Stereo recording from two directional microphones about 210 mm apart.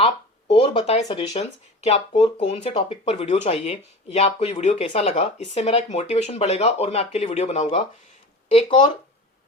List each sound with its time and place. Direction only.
0.5 s speech: 25° left (ahead or behind)